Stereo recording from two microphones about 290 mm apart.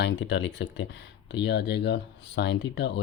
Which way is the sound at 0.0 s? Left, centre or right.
Left.